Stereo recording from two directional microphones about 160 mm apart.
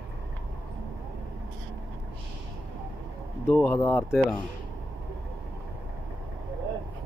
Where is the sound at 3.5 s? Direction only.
10° left (ahead or behind).